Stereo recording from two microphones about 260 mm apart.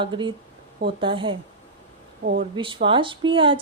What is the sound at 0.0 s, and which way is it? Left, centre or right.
Speech, centre.